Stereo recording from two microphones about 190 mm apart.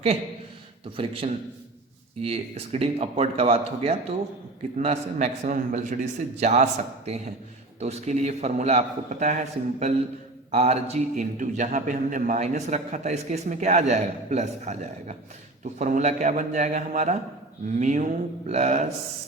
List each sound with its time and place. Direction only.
0.9 s a man's voice: 30° right (ahead or behind)